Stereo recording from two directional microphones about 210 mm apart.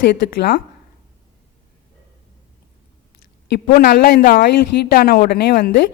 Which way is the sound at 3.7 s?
45° left (ahead or behind).